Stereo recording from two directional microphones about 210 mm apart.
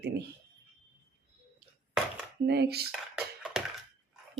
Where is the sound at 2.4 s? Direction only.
50° right (ahead or behind).